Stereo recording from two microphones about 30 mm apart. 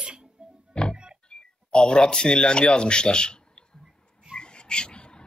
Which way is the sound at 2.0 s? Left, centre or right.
Left.